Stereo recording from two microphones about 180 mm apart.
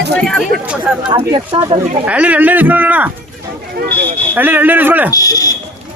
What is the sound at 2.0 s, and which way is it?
Speech, 10° right (ahead or behind).